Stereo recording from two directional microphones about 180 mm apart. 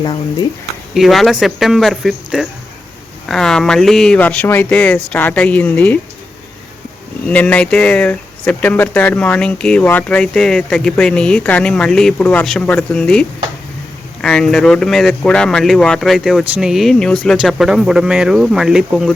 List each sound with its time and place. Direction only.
0.0 s speech: 25° left (ahead or behind)
0.9 s speech: centre (ahead or behind)
7.3 s speech: 5° left (ahead or behind)